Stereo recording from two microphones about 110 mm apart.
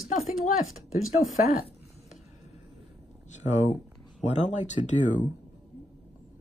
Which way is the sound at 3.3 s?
90° left.